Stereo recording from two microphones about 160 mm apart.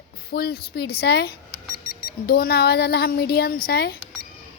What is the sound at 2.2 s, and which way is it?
A woman's voice, 75° left (ahead or behind).